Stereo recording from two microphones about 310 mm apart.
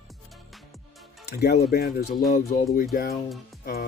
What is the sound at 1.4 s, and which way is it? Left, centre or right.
Speech, left.